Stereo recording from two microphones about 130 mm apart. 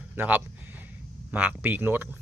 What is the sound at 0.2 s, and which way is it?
Speech, 15° right (ahead or behind).